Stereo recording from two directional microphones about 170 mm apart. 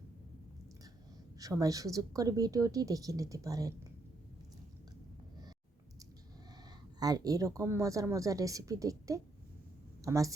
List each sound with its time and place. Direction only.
1.4 s speech: 20° right (ahead or behind)
7.0 s speech: 20° right (ahead or behind)